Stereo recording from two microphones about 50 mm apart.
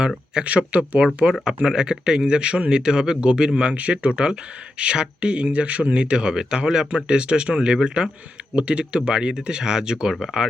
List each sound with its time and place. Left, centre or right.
0.4 s speech: right